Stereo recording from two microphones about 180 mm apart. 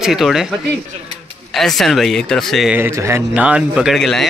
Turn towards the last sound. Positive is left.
turn(degrees=0)  # may be behind; listen again after turning